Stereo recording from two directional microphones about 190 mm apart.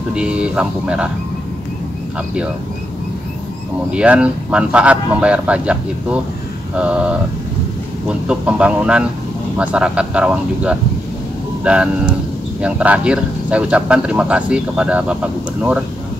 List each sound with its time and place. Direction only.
0.1 s speech: 5° right (ahead or behind)
3.9 s speech: 5° right (ahead or behind)
6.8 s speech: 5° right (ahead or behind)